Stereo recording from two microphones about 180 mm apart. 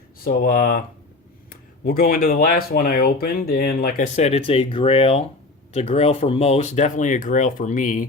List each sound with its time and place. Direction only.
0.3 s speech: 55° left (ahead or behind)
1.8 s speech: 55° left (ahead or behind)